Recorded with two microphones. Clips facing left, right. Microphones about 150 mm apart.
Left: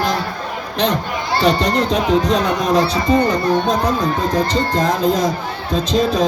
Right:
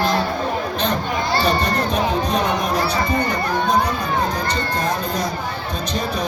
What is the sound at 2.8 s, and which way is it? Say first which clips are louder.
Speech: left 5 dB; 25° left (ahead or behind).